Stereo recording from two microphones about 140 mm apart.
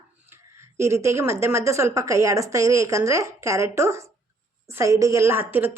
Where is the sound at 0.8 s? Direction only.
20° right (ahead or behind).